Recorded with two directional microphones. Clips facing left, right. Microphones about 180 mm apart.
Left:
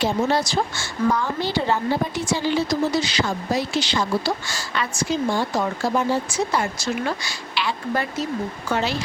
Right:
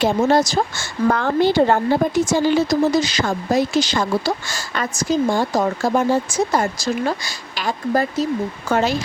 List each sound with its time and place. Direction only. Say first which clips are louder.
0.0 s speech: right 5 dB; 45° right (ahead or behind)